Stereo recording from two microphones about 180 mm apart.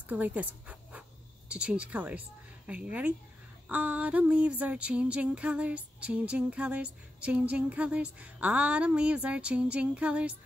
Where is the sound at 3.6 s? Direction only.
5° right (ahead or behind).